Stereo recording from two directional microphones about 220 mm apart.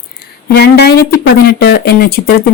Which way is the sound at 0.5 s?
45° left (ahead or behind).